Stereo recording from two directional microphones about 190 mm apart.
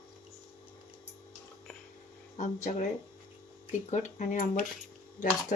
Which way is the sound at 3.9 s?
40° left (ahead or behind).